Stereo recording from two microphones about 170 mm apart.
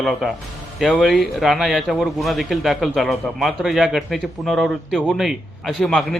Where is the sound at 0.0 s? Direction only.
Centre (ahead or behind).